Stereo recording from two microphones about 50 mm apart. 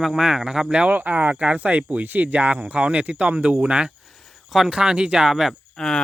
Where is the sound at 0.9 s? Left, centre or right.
Right.